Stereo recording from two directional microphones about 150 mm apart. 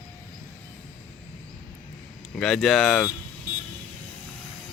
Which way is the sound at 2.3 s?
Centre (ahead or behind).